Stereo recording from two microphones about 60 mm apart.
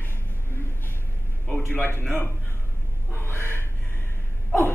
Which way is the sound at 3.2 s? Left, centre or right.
Left.